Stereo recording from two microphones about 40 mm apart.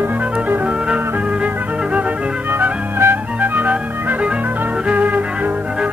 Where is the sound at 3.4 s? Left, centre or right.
Right.